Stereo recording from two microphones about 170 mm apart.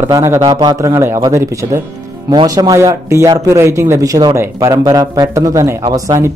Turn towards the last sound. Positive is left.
turn(degrees=-25)  # may be behind; listen again after turning